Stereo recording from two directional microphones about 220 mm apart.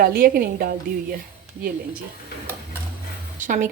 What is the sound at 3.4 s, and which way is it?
Speech, 35° right (ahead or behind).